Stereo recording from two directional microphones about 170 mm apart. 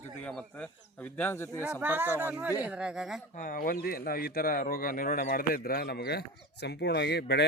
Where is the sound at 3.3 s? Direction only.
55° left (ahead or behind).